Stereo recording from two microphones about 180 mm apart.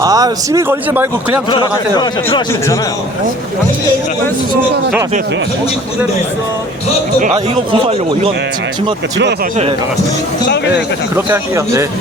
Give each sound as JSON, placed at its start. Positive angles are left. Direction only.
{"t": 0.0, "sound": "speech", "side_deg": -20}
{"t": 1.5, "sound": "speech", "side_deg": 25}
{"t": 7.7, "sound": "speech", "side_deg": -35}
{"t": 11.1, "sound": "speech", "side_deg": -15}